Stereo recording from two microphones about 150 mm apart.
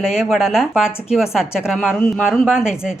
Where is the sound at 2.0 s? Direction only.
5° left (ahead or behind).